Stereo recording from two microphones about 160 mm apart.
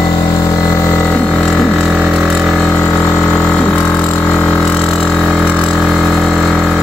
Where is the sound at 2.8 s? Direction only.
10° left (ahead or behind).